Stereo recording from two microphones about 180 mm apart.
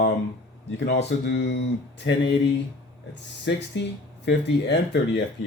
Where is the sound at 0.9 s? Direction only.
70° left (ahead or behind).